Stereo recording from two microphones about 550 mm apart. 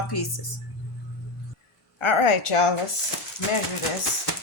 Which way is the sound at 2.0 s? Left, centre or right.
Left.